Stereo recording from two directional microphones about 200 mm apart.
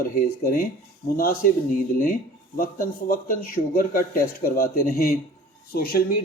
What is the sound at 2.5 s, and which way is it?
Speech, 45° left (ahead or behind).